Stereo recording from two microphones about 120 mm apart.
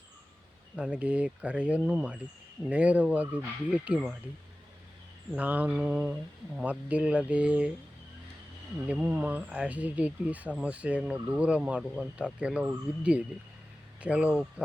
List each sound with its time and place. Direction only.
0.8 s speech: 10° right (ahead or behind)
5.3 s speech: 10° right (ahead or behind)
8.9 s speech: 15° right (ahead or behind)